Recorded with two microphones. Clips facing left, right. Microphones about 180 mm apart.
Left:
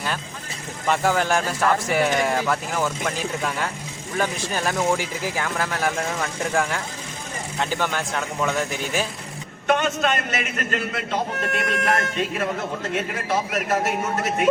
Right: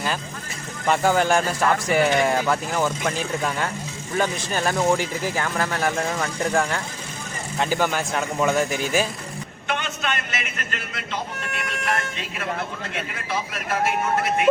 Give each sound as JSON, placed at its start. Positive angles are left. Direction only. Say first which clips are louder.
{"t": 0.9, "sound": "speech", "louder": "right 2 dB", "side_deg": 0}
{"t": 4.2, "sound": "speech", "louder": "right 1 dB", "side_deg": 0}
{"t": 9.6, "sound": "a man's voice", "louder": "left 7 dB", "side_deg": 45}